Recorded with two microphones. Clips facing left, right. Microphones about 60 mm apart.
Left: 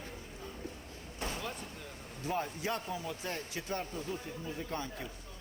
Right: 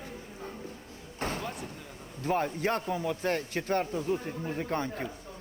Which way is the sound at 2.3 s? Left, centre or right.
Right.